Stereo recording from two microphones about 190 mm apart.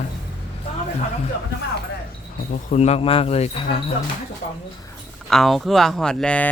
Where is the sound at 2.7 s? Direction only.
35° left (ahead or behind).